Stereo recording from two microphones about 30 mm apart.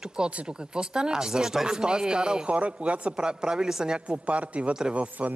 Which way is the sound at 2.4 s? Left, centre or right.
Right.